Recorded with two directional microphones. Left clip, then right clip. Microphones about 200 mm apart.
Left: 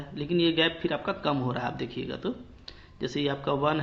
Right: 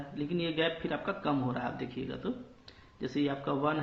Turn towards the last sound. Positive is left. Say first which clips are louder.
# left 5 dB
turn(degrees=40)  # may be behind; listen again after turning